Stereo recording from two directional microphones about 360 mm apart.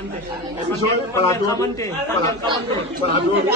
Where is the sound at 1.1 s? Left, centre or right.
Centre.